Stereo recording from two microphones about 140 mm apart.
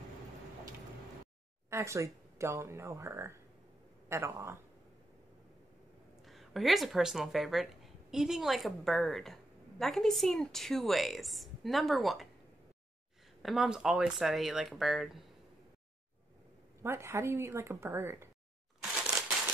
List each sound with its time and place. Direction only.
1.7 s speech: 20° right (ahead or behind)
6.2 s speech: centre (ahead or behind)
13.4 s speech: centre (ahead or behind)
16.8 s speech: 20° right (ahead or behind)
18.8 s crushing: 5° right (ahead or behind)